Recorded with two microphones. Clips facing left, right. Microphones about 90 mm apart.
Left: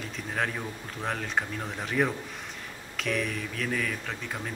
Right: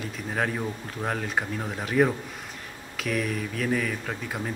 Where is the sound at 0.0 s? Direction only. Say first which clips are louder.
Right 3 dB; 5° right (ahead or behind).